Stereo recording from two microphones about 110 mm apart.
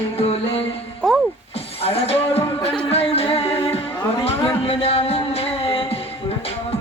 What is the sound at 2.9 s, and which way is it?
Music, 65° left (ahead or behind).